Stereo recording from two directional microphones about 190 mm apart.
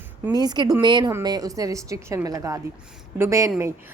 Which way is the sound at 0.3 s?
20° right (ahead or behind).